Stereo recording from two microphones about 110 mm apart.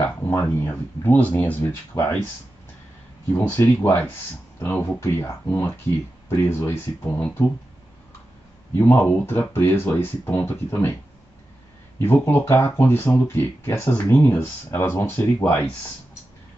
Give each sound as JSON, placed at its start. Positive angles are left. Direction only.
{"t": 0.3, "sound": "speech", "side_deg": 20}
{"t": 3.3, "sound": "speech", "side_deg": 20}
{"t": 8.7, "sound": "speech", "side_deg": 20}
{"t": 12.0, "sound": "speech", "side_deg": 20}